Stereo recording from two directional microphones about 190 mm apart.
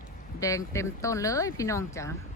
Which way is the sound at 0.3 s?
15° left (ahead or behind).